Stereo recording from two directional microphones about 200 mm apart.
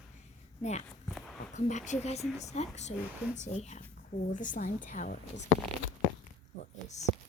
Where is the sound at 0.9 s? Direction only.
Centre (ahead or behind).